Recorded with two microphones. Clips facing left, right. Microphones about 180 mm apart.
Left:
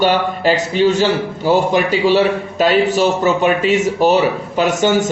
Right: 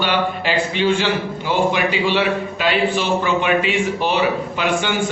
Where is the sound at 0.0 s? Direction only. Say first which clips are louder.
Left 5 dB; 40° left (ahead or behind).